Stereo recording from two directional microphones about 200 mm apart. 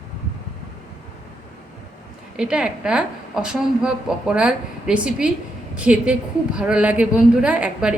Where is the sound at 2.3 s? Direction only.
5° right (ahead or behind).